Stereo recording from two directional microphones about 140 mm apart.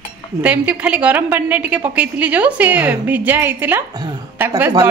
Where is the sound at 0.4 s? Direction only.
10° right (ahead or behind).